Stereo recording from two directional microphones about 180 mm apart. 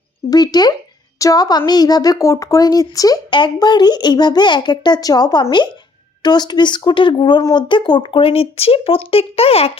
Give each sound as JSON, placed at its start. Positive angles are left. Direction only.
{"t": 0.3, "sound": "a woman's voice", "side_deg": 20}